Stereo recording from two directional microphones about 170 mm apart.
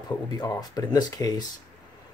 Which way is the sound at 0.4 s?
20° left (ahead or behind).